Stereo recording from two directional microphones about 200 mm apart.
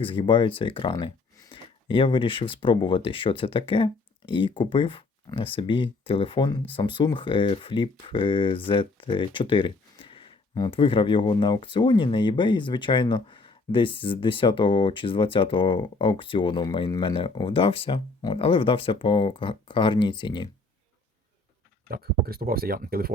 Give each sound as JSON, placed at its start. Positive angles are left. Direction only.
{"t": 0.0, "sound": "speech", "side_deg": 25}
{"t": 21.8, "sound": "speech", "side_deg": -50}